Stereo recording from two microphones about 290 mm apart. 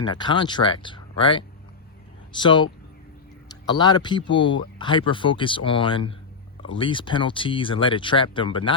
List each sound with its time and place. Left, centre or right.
0.0 s speech: centre